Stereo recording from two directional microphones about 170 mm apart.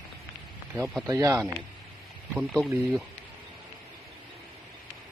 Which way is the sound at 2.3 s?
5° left (ahead or behind).